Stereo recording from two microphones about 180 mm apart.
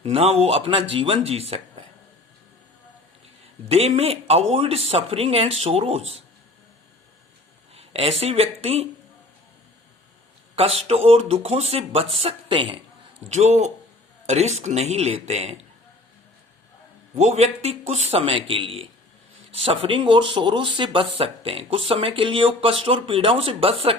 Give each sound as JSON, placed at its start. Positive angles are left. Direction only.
{"t": 0.0, "sound": "speech", "side_deg": -35}
{"t": 3.7, "sound": "speech", "side_deg": -35}
{"t": 7.7, "sound": "speech", "side_deg": -35}
{"t": 10.5, "sound": "speech", "side_deg": -35}
{"t": 13.3, "sound": "speech", "side_deg": -40}
{"t": 17.2, "sound": "speech", "side_deg": -40}